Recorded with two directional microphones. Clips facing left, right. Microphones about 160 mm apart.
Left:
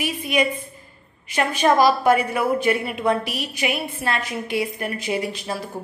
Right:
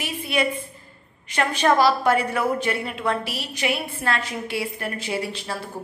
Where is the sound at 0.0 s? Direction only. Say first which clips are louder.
Left 3 dB; 15° left (ahead or behind).